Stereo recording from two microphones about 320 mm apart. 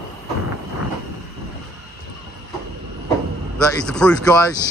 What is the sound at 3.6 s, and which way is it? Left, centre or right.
Speech, centre.